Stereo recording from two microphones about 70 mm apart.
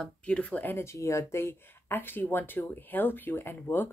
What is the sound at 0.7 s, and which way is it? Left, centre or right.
Speech, left.